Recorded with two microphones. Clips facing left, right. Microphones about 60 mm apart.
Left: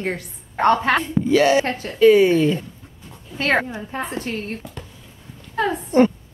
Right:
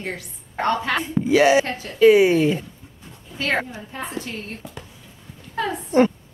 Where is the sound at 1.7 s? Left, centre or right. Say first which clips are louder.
Left 4 dB; left.